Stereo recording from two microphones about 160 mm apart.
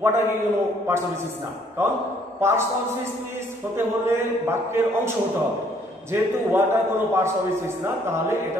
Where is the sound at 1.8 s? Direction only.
15° right (ahead or behind).